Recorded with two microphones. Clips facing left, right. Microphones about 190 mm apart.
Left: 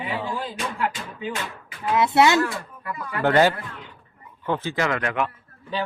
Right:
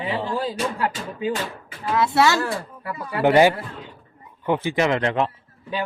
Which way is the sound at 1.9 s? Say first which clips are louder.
Left 1 dB; 20° left (ahead or behind).